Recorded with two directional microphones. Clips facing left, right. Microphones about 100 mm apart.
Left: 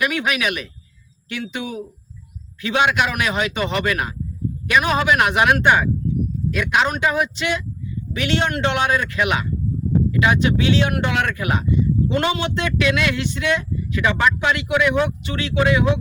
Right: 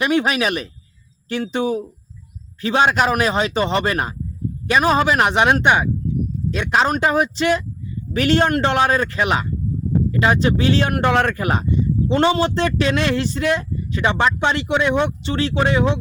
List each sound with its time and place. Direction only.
0.0 s speech: 30° right (ahead or behind)